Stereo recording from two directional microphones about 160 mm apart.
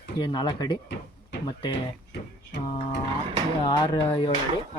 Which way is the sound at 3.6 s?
25° left (ahead or behind).